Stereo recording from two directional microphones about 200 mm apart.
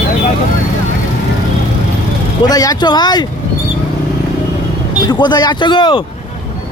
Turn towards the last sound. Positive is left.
turn(degrees=25)  # may be behind; listen again after turning